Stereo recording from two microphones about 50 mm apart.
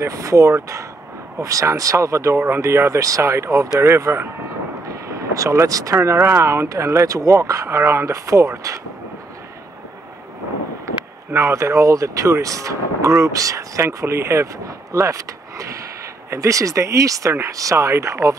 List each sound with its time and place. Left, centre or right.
0.0 s speech: right
3.8 s speech: right
4.8 s speech: right
11.3 s speech: right